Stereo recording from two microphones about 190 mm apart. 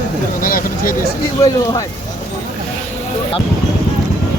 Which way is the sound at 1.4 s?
20° left (ahead or behind).